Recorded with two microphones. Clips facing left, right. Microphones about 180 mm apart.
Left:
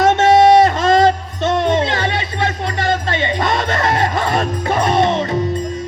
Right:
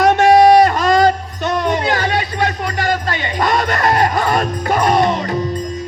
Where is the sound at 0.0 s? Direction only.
25° left (ahead or behind).